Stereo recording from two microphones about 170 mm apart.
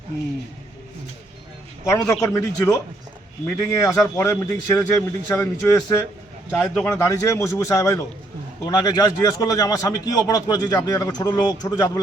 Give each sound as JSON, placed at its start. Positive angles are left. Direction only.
{"t": 1.8, "sound": "speech", "side_deg": 15}
{"t": 7.1, "sound": "a man's voice", "side_deg": 15}